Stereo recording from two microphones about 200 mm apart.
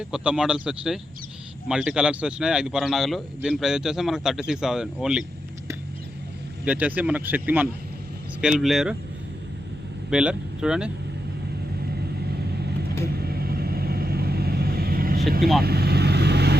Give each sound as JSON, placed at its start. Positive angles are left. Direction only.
{"t": 0.0, "sound": "speech", "side_deg": -5}
{"t": 6.7, "sound": "speech", "side_deg": -5}
{"t": 10.1, "sound": "speech", "side_deg": -5}
{"t": 13.1, "sound": "vehicle", "side_deg": -50}
{"t": 15.4, "sound": "speech", "side_deg": 0}
{"t": 15.6, "sound": "vehicle", "side_deg": -50}